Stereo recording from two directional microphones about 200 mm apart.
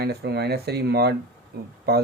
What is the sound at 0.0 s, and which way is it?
Speech, 55° right (ahead or behind).